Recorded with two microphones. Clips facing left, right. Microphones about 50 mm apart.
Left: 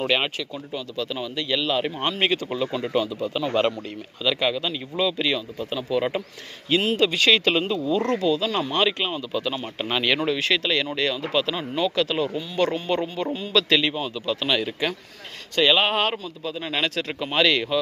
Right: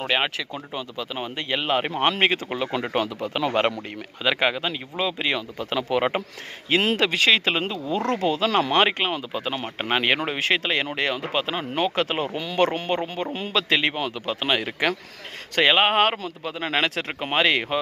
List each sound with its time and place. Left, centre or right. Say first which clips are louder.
0.1 s speech: even; right
2.8 s speech: left 1 dB; right
3.5 s speech: even; right
5.5 s speech: right 1 dB; right
7.3 s speech: left 1 dB; right
12.3 s speech: right 1 dB; right
12.5 s speech: right 2 dB; right
12.9 s speech: left 1 dB; right
13.9 s speech: even; right
14.4 s speech: right 2 dB; right